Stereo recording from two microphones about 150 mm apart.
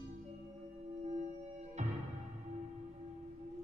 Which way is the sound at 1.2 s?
50° right (ahead or behind).